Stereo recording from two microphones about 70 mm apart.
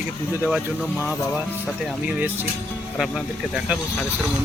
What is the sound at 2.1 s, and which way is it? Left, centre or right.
Speech, right.